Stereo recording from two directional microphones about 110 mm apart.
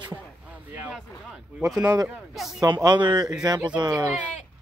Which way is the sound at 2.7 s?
45° right (ahead or behind).